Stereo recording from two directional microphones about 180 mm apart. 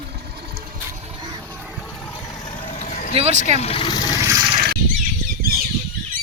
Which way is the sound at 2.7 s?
45° left (ahead or behind).